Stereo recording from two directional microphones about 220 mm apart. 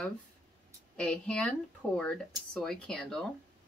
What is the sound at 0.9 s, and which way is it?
Speech, 5° left (ahead or behind).